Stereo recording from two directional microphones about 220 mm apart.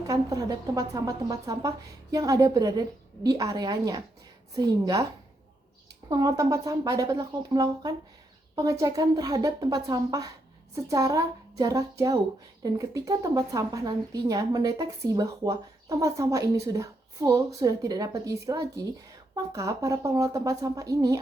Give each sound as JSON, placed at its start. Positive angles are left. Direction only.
{"t": 0.1, "sound": "a woman's voice", "side_deg": -15}
{"t": 6.1, "sound": "a woman's voice", "side_deg": -15}